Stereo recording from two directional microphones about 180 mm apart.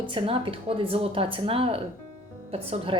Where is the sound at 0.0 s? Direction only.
30° right (ahead or behind).